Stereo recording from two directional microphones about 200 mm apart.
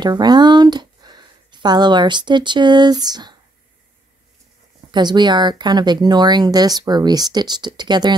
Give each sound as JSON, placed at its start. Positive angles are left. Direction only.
{"t": 0.0, "sound": "speech", "side_deg": -20}
{"t": 4.9, "sound": "speech", "side_deg": -20}